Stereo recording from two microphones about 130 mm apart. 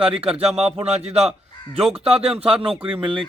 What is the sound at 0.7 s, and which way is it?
Speech, 50° right (ahead or behind).